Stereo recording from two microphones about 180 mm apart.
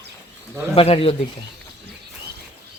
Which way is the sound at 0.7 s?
30° left (ahead or behind).